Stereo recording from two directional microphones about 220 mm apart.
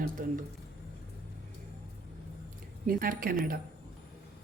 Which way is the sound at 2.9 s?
40° right (ahead or behind).